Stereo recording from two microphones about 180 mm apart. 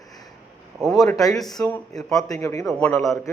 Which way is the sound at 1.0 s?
20° left (ahead or behind).